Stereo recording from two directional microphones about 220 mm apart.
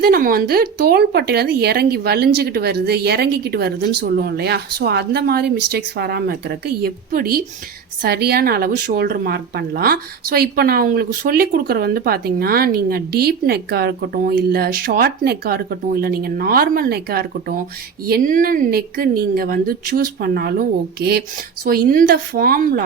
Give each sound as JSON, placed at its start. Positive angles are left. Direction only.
{"t": 0.0, "sound": "a woman's voice", "side_deg": -40}